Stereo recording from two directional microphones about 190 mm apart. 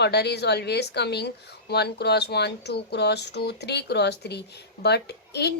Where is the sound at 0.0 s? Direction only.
60° left (ahead or behind).